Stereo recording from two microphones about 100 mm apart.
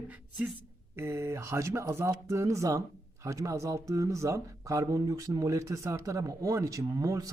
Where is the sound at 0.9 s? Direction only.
25° right (ahead or behind).